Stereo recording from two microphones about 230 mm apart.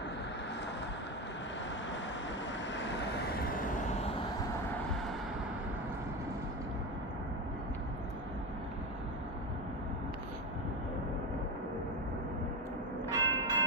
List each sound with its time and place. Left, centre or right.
2.7 s vehicle: left
13.1 s church bell: centre